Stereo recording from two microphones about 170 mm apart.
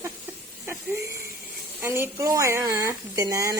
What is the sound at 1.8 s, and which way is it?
Speech, 15° right (ahead or behind).